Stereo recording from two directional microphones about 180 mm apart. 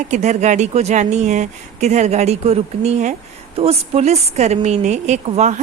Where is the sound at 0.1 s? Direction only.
40° right (ahead or behind).